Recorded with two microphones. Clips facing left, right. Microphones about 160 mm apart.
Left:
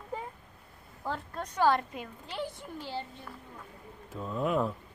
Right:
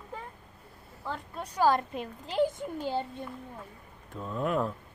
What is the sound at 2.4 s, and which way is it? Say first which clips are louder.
Speech: right 10 dB; 45° right (ahead or behind).